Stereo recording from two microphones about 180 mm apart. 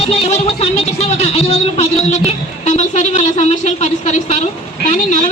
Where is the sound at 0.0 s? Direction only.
35° left (ahead or behind).